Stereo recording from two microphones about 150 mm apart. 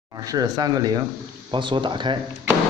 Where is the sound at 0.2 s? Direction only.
25° right (ahead or behind).